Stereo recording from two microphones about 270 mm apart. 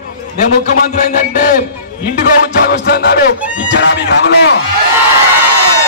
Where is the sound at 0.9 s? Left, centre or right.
Left.